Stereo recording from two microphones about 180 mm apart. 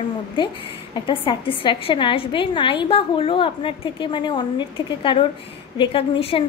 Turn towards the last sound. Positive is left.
turn(degrees=30)  # may be behind; listen again after turning